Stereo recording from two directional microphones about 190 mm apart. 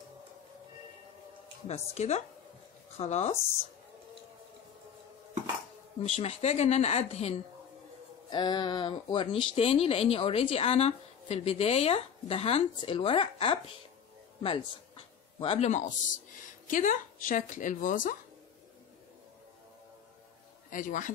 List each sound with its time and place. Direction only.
1.9 s speech: 35° left (ahead or behind)
6.0 s speech: 35° left (ahead or behind)
8.3 s speech: 25° left (ahead or behind); by 18.1 s 45° left (ahead or behind)
20.7 s a man's voice: 45° left (ahead or behind)